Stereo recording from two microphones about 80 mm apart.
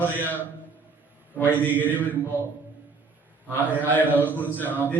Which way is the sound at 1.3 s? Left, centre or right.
Left.